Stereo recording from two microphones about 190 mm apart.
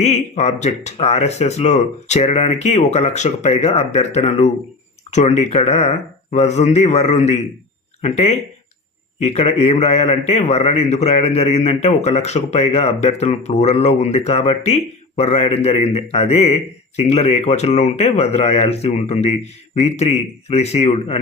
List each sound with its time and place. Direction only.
0.0 s a man's voice: 35° left (ahead or behind)